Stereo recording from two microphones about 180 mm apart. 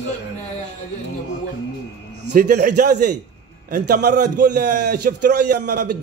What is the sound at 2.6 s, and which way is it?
A man's voice, 60° right (ahead or behind).